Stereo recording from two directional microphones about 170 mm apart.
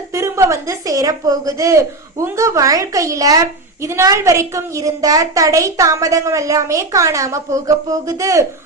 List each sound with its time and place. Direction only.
0.1 s a woman's voice: 15° right (ahead or behind)